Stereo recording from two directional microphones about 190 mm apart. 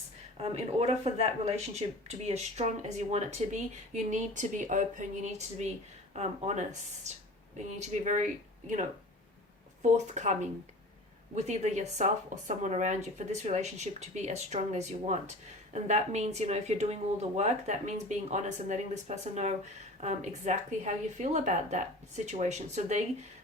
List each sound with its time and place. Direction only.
0.3 s speech: 30° right (ahead or behind)
10.1 s speech: 40° right (ahead or behind)
11.3 s speech: 35° right (ahead or behind)